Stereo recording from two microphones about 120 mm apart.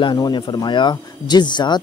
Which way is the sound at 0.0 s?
35° left (ahead or behind).